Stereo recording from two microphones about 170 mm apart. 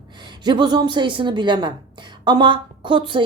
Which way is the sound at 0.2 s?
25° right (ahead or behind).